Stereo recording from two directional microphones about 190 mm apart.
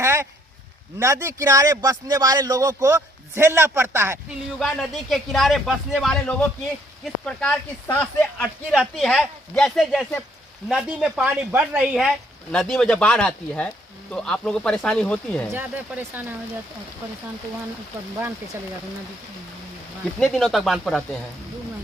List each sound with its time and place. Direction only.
0.0 s a sound: 15° right (ahead or behind)
0.9 s a man's voice: 15° right (ahead or behind)
4.6 s speech: centre (ahead or behind)
15.5 s a man's voice: 10° right (ahead or behind)
20.1 s speech: 5° left (ahead or behind)